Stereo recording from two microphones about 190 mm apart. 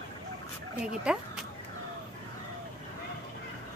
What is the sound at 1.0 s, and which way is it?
Speech, 5° right (ahead or behind).